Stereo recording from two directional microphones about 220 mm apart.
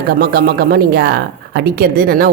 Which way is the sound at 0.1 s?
45° right (ahead or behind).